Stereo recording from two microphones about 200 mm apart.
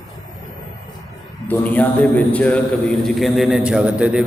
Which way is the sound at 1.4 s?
10° left (ahead or behind).